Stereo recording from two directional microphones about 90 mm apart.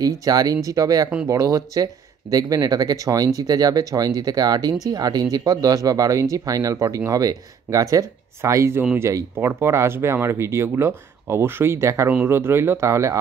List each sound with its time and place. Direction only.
0.0 s speech: 45° right (ahead or behind)